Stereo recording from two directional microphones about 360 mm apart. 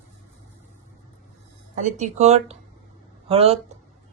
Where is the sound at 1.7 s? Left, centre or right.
Centre.